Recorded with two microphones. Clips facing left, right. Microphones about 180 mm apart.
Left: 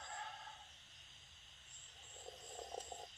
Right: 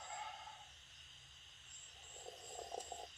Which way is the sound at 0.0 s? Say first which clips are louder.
Right 1 dB; 5° right (ahead or behind).